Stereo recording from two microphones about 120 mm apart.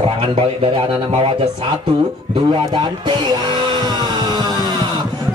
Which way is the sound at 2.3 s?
40° right (ahead or behind).